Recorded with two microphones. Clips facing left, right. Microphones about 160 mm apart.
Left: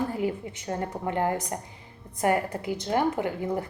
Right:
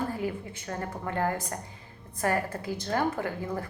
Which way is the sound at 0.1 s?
20° left (ahead or behind).